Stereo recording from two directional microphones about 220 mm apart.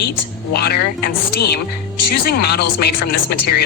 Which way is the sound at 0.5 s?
45° left (ahead or behind).